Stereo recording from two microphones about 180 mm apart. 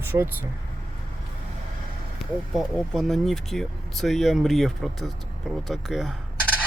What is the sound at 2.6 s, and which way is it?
Speech, centre (ahead or behind).